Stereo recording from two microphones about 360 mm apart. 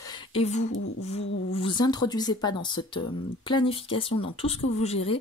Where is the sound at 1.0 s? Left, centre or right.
Centre.